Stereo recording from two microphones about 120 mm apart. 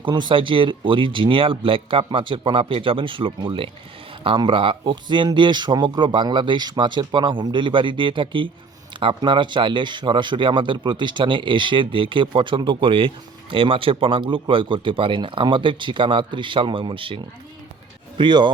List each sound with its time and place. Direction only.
0.0 s speech: 40° right (ahead or behind)